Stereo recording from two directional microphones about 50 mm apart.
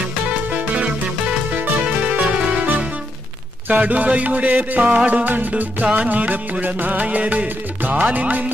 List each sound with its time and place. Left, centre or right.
0.5 s music: right